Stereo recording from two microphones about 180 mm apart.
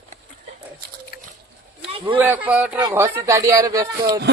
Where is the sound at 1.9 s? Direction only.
30° right (ahead or behind).